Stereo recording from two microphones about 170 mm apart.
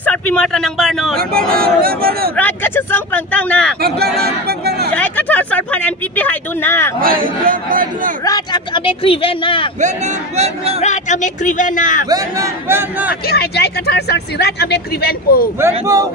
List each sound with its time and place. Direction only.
0.0 s a man's voice: 10° left (ahead or behind)
1.5 s a man's voice: 60° right (ahead or behind)
2.3 s speech: 10° left (ahead or behind)
3.8 s a sound: 65° right (ahead or behind)
4.9 s speech: 10° left (ahead or behind)
7.0 s a man's voice: 55° right (ahead or behind)
8.3 s speech: 30° left (ahead or behind)
9.8 s speech: 40° right (ahead or behind)
10.8 s speech: 45° left (ahead or behind)
12.1 s a man's voice: 15° right (ahead or behind)
13.3 s speech: 70° left (ahead or behind)
15.6 s speech: 20° right (ahead or behind)